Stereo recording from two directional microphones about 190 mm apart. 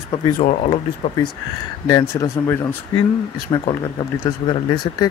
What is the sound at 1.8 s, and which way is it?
Speech, 15° left (ahead or behind).